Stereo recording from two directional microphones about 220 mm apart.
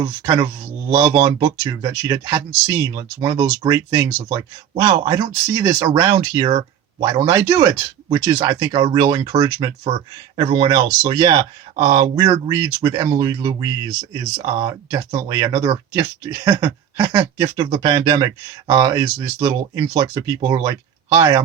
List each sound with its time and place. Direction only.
0.0 s speech: 20° right (ahead or behind)